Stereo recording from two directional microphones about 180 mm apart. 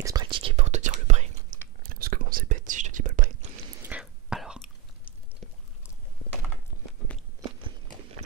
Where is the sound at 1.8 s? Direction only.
55° right (ahead or behind).